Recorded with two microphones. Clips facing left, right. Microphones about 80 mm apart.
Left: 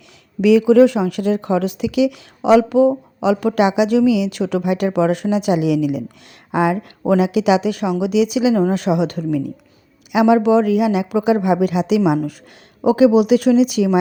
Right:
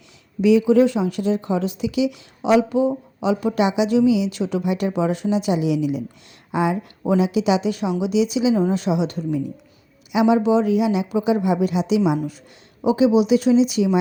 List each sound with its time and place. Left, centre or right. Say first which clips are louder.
0.4 s speech: left 4 dB; left